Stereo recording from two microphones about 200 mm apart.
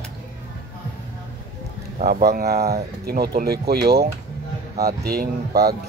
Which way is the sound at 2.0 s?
45° right (ahead or behind).